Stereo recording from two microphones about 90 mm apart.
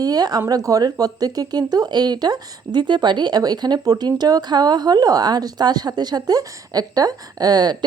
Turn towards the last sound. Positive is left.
turn(degrees=-50)  # may be behind; listen again after turning